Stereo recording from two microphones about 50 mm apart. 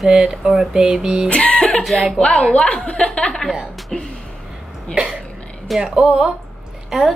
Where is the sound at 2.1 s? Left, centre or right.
Centre.